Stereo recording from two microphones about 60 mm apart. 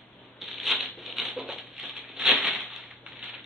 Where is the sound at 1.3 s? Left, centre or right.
Centre.